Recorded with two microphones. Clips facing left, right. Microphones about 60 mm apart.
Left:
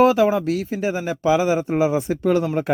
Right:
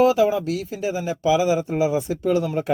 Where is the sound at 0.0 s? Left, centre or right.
Left.